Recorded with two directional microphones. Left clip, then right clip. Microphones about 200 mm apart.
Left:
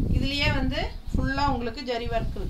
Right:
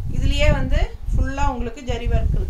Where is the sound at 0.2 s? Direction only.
15° right (ahead or behind).